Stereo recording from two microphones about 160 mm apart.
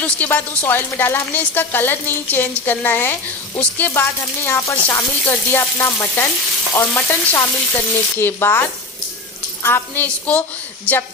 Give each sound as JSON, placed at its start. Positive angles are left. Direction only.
{"t": 0.0, "sound": "speech", "side_deg": 10}